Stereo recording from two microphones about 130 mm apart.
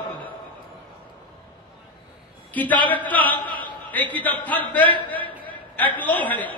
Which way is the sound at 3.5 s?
40° right (ahead or behind).